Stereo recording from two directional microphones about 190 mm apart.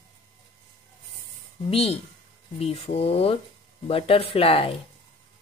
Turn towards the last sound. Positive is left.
turn(degrees=30)  # may be behind; listen again after turning